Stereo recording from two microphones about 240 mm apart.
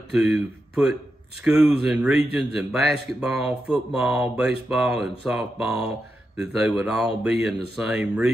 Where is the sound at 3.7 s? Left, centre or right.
Centre.